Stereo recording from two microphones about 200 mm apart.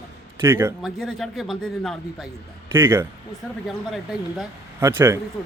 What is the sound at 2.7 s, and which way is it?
Speech, 10° right (ahead or behind).